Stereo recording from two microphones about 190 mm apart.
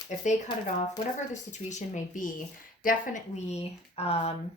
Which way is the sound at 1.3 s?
40° left (ahead or behind).